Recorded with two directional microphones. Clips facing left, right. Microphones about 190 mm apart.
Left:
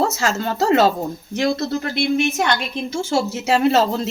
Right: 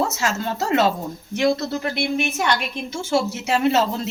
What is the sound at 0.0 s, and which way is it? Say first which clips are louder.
Speech: left 3 dB; 30° left (ahead or behind).